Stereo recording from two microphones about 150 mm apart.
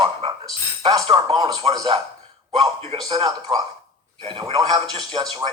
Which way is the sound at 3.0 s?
30° right (ahead or behind).